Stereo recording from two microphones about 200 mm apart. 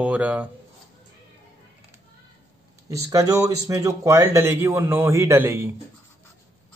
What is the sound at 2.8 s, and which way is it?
Speech, 15° right (ahead or behind).